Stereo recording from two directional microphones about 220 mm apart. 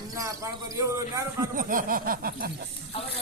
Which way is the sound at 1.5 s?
40° right (ahead or behind).